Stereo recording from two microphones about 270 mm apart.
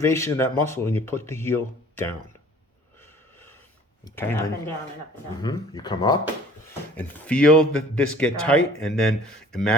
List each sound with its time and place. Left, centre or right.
0.0 s speech: centre
4.0 s speech: centre